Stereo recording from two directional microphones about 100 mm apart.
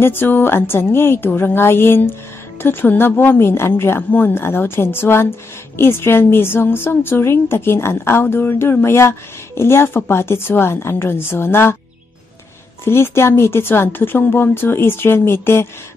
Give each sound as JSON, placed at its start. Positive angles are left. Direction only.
{"t": 0.0, "sound": "a woman's voice", "side_deg": 20}
{"t": 12.8, "sound": "a woman's voice", "side_deg": 25}